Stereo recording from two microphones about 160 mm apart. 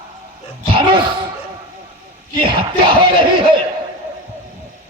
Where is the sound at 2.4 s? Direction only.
35° right (ahead or behind).